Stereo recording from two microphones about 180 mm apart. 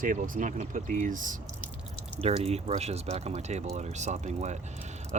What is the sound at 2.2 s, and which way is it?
Speech, 35° right (ahead or behind).